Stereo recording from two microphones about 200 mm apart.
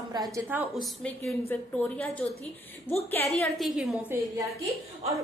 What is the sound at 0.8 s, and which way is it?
A woman's voice, 5° left (ahead or behind).